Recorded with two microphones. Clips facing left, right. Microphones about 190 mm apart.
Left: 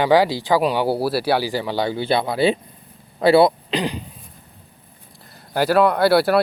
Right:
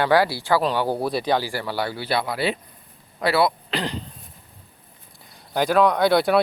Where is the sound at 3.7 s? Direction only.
15° left (ahead or behind).